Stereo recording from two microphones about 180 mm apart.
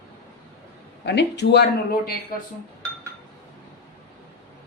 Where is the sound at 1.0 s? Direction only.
70° left (ahead or behind).